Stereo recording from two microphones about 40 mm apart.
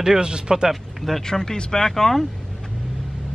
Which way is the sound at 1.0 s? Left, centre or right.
Centre.